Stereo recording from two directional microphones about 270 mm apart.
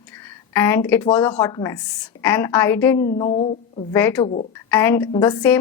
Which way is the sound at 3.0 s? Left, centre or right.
Left.